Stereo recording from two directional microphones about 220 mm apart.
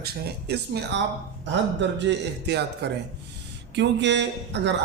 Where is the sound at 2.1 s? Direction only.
50° right (ahead or behind).